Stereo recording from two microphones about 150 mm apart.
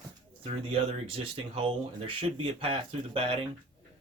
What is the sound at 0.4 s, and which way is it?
Speech, 40° right (ahead or behind).